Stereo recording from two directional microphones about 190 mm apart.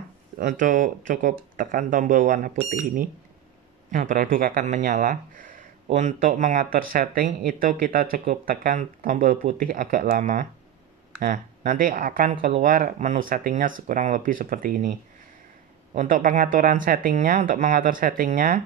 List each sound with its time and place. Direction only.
0.4 s speech: 45° right (ahead or behind)
3.9 s speech: 45° right (ahead or behind)
15.9 s speech: 45° right (ahead or behind)